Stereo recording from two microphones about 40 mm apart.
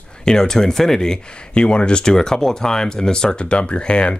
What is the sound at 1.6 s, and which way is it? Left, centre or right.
Speech, left.